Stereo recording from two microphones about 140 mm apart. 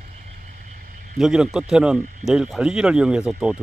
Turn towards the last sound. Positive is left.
turn(degrees=-5)  # may be behind; listen again after turning